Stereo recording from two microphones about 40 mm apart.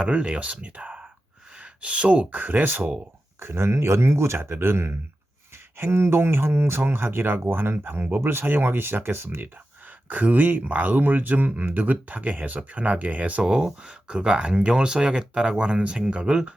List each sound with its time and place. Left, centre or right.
0.0 s speech: right
1.5 s a sound: right
2.3 s speech: right
3.4 s speech: right
10.1 s speech: right
13.4 s speech: right